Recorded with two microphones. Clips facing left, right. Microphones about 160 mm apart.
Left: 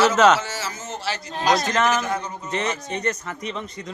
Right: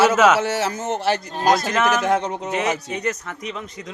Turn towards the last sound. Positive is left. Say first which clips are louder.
# even
turn(degrees=0)  # may be behind; listen again after turning